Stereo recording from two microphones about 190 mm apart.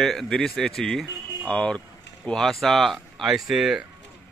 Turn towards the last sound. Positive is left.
turn(degrees=0)  # may be behind; listen again after turning